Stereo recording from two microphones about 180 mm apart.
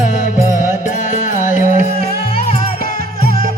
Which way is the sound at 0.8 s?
45° left (ahead or behind).